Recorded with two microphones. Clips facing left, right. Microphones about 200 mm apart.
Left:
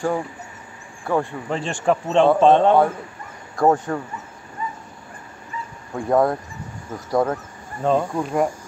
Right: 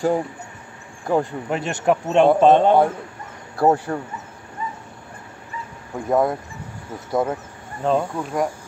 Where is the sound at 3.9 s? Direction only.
30° right (ahead or behind).